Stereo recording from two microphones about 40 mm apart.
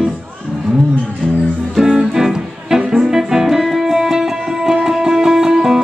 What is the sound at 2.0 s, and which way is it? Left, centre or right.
Music, centre.